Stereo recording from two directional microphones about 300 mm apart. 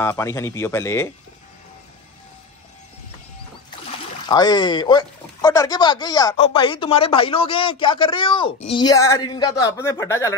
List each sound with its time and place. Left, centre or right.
0.0 s speech: centre
4.3 s speech: centre